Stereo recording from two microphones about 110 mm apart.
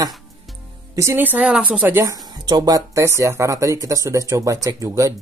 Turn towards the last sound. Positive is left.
turn(degrees=-30)  # may be behind; listen again after turning